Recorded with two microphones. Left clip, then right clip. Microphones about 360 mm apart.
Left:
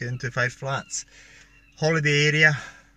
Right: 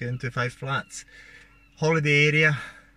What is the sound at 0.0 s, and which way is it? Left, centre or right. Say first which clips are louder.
Speech: left 3 dB; centre.